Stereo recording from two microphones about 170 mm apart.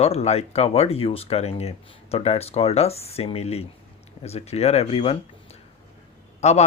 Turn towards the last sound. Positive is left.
turn(degrees=40)  # may be behind; listen again after turning